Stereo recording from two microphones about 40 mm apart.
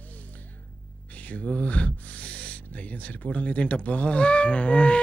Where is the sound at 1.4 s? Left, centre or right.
Left.